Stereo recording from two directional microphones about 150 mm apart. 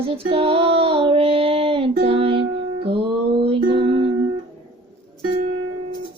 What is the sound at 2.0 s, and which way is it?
Music, 40° right (ahead or behind).